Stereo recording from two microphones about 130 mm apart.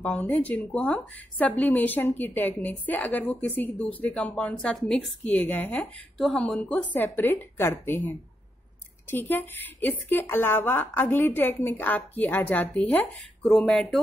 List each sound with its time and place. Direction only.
0.0 s a woman's voice: 10° left (ahead or behind)